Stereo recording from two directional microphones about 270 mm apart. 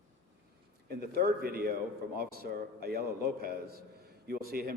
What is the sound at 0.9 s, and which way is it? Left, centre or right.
A man's voice, right.